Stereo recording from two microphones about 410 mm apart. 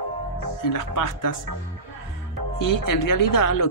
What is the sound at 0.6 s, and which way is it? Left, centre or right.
Speech, left.